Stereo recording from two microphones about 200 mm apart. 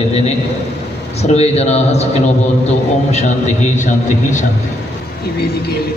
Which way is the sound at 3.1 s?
35° left (ahead or behind).